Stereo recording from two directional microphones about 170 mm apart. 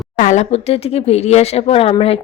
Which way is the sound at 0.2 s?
45° left (ahead or behind).